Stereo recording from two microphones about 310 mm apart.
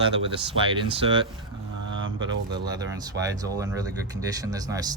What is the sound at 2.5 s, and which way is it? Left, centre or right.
Speech, centre.